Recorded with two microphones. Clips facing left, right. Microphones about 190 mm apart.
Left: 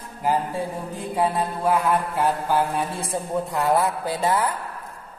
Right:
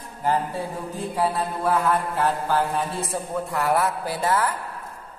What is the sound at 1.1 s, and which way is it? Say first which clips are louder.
Mantra: left 2 dB; 15° left (ahead or behind).